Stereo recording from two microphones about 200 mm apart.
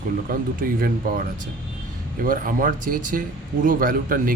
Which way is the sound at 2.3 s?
45° right (ahead or behind).